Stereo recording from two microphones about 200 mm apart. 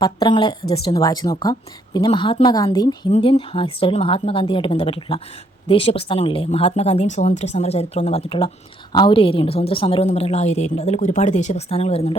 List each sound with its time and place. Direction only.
0.0 s a woman's voice: 20° left (ahead or behind)